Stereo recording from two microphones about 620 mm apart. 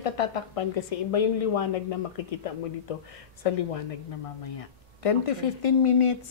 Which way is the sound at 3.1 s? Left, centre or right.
Left.